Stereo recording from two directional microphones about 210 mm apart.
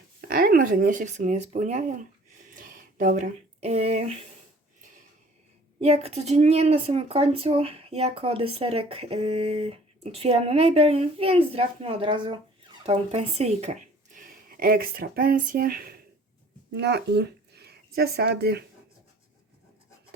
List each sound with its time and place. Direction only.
0.3 s speech: 45° right (ahead or behind)
5.8 s a woman's voice: 30° right (ahead or behind); by 18.6 s 50° right (ahead or behind)